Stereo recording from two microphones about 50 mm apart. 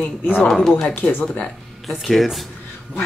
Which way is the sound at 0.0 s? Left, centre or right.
Left.